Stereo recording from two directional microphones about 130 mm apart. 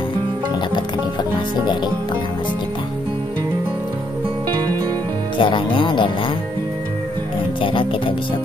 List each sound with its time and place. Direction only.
5.4 s speech: 40° left (ahead or behind)
7.6 s music: 40° left (ahead or behind)